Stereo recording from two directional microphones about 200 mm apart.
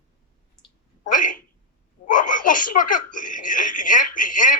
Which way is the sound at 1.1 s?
40° left (ahead or behind).